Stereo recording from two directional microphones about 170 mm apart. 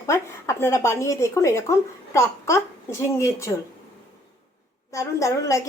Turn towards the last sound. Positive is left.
turn(degrees=20)  # may be behind; listen again after turning